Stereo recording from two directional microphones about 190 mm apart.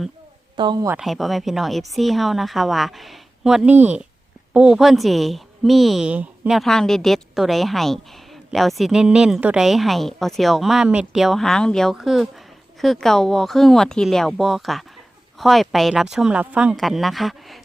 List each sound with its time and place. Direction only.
0.5 s speech: 25° right (ahead or behind)
0.9 s a woman's voice: centre (ahead or behind)